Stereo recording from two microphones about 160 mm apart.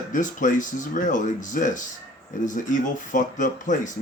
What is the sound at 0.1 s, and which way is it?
Speech, 55° left (ahead or behind).